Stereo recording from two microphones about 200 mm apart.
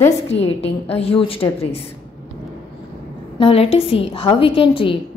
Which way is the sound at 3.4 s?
30° left (ahead or behind).